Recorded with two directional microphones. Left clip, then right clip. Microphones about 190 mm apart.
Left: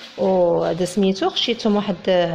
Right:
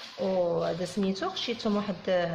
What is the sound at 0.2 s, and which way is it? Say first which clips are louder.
Speech: left 10 dB; 35° left (ahead or behind).